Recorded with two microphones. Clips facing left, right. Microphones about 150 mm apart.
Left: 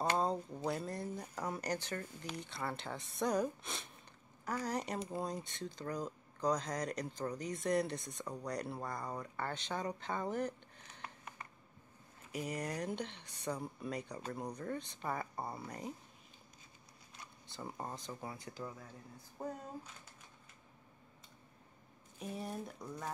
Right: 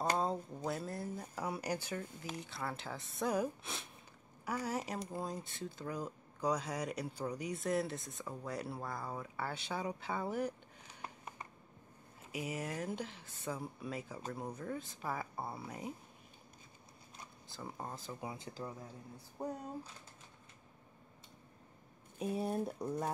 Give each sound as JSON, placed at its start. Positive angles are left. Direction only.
{"t": 0.7, "sound": "speech", "side_deg": 0}
{"t": 12.3, "sound": "speech", "side_deg": -5}
{"t": 17.5, "sound": "speech", "side_deg": 0}
{"t": 18.2, "sound": "speech", "side_deg": -20}
{"t": 22.7, "sound": "speech", "side_deg": -30}